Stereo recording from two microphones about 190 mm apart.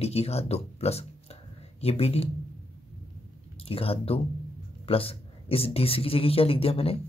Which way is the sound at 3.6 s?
30° left (ahead or behind).